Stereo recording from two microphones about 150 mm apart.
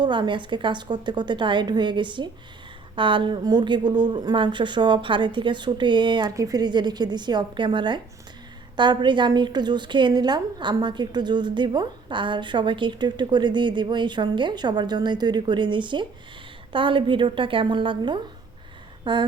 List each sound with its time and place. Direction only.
0.0 s a woman's voice: 30° right (ahead or behind)